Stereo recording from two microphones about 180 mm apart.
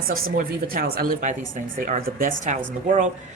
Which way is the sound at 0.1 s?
50° right (ahead or behind).